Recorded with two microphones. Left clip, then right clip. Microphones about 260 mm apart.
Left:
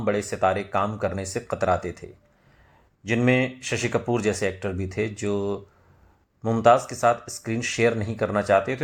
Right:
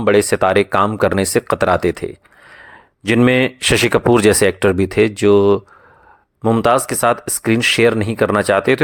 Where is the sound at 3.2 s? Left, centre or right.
Right.